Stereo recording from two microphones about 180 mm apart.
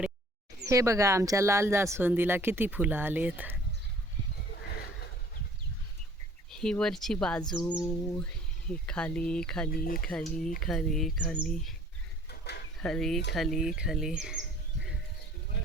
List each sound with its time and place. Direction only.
0.6 s speech: 15° right (ahead or behind)
6.5 s speech: 5° left (ahead or behind)
7.9 s a sound: 10° left (ahead or behind)
8.7 s speech: 5° left (ahead or behind)
9.7 s speech: 55° left (ahead or behind)
10.0 s speech: 5° left (ahead or behind)
12.3 s a sound: 65° left (ahead or behind)
12.8 s speech: centre (ahead or behind)